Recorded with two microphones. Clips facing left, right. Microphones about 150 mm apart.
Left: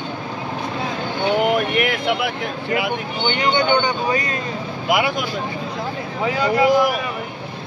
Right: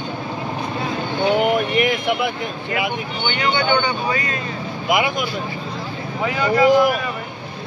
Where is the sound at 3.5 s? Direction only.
20° left (ahead or behind).